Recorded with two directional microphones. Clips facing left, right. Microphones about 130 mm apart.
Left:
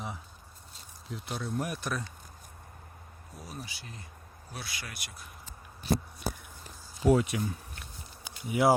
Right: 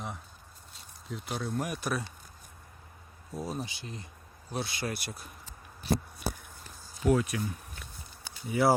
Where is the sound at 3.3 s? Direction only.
25° right (ahead or behind).